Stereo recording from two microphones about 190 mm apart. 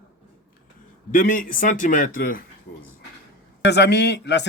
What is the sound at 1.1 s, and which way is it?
A man's voice, 45° left (ahead or behind).